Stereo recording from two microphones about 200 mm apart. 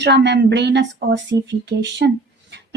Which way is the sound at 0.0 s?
60° right (ahead or behind).